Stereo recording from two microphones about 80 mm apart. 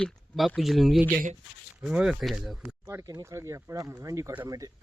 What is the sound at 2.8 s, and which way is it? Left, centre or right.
Speech, right.